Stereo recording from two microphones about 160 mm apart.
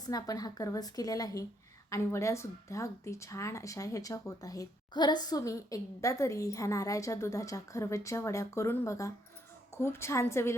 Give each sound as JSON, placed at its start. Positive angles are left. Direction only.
{"t": 0.0, "sound": "a woman's voice", "side_deg": 25}